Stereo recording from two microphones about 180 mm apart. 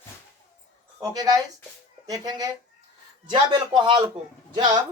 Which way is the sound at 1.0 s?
20° right (ahead or behind).